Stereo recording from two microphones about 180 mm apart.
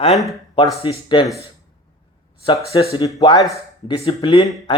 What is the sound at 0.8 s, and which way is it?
Speech, 25° left (ahead or behind).